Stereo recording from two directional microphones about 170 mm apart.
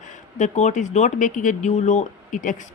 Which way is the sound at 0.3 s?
45° left (ahead or behind).